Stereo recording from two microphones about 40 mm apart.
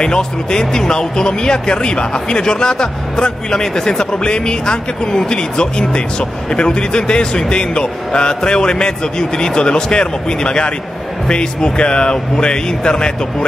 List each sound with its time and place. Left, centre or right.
0.0 s speech: centre